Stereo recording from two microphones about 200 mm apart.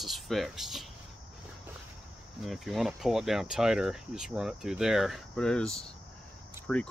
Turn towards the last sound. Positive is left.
turn(degrees=5)  # may be behind; listen again after turning